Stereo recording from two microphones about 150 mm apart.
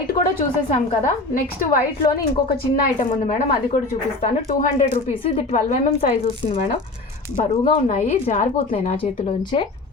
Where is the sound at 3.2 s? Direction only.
40° left (ahead or behind).